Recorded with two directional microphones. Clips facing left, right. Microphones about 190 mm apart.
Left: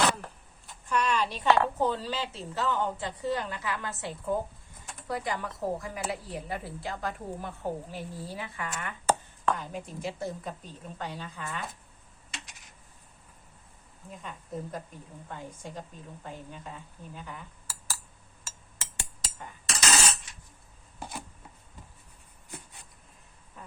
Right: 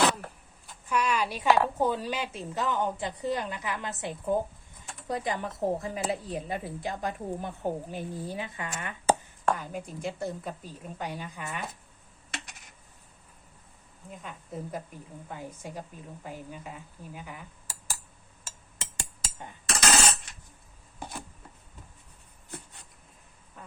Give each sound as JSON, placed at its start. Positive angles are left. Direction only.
{"t": 0.7, "sound": "a woman's voice", "side_deg": -5}
{"t": 9.0, "sound": "a woman's voice", "side_deg": -10}
{"t": 14.2, "sound": "a woman's voice", "side_deg": 0}
{"t": 17.2, "sound": "cutlery", "side_deg": -10}
{"t": 19.6, "sound": "a sound", "side_deg": -55}